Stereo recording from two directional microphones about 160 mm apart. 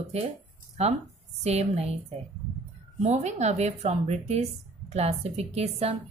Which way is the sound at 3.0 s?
45° right (ahead or behind).